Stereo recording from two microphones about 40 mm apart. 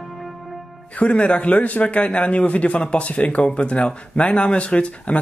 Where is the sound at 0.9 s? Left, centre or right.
Left.